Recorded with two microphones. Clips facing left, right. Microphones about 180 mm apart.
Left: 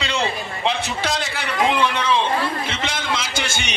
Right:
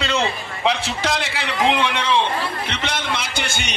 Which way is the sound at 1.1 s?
90° right.